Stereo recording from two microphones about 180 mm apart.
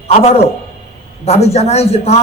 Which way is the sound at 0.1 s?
35° left (ahead or behind).